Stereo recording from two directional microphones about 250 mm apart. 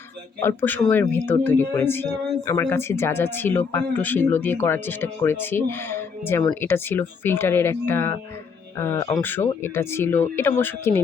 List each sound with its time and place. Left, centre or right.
0.4 s speech: centre